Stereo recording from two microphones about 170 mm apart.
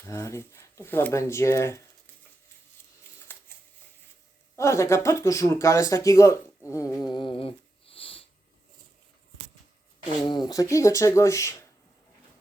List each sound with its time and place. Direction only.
0.0 s speech: 15° left (ahead or behind)
3.3 s shuffling cards: 15° left (ahead or behind)
4.5 s speech: 15° left (ahead or behind)
6.7 s a sound: 20° left (ahead or behind)
10.2 s speech: 25° left (ahead or behind)